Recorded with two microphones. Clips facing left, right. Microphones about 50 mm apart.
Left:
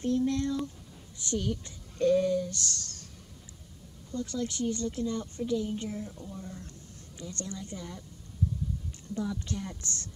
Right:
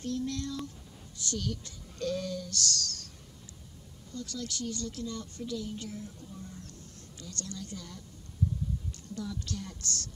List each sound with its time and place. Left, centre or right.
0.0 s a woman's voice: left
4.1 s a woman's voice: left
9.1 s a woman's voice: left